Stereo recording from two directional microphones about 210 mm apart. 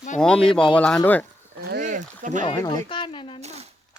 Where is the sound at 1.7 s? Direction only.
40° right (ahead or behind).